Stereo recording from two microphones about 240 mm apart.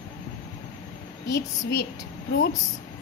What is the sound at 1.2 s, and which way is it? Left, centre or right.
Speech, left.